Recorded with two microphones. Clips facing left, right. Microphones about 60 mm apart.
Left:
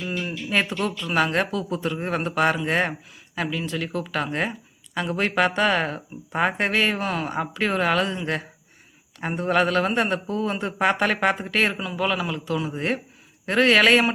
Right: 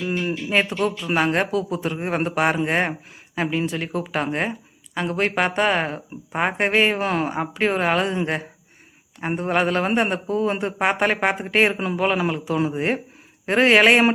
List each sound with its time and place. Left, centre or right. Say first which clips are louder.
0.1 s a sound: right 5 dB; right
0.4 s speech: right 2 dB; centre
9.2 s speech: even; centre